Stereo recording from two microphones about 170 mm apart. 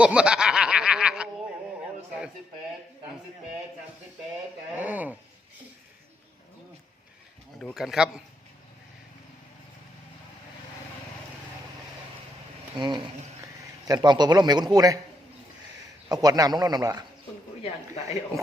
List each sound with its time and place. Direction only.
0.0 s snicker: 5° right (ahead or behind)
4.7 s a sound: 10° right (ahead or behind)
7.6 s speech: centre (ahead or behind)
12.7 s insect: 25° right (ahead or behind)
13.8 s a man's voice: 25° right (ahead or behind)
16.0 s a man's voice: 20° right (ahead or behind)